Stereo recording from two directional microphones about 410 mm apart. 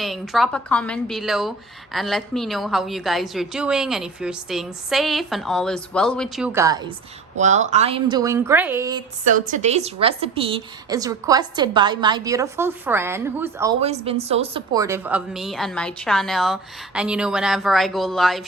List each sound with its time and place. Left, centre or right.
0.0 s a woman's voice: centre